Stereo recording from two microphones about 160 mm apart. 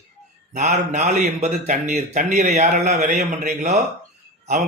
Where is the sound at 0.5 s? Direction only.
50° right (ahead or behind).